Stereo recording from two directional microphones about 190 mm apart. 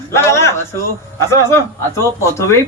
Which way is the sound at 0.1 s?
15° left (ahead or behind).